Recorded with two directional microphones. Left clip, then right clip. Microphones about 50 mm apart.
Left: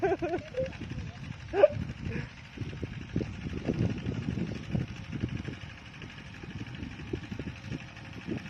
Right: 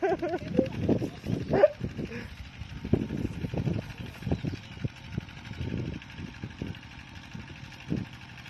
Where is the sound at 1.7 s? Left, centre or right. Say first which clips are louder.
Right 1 dB; left.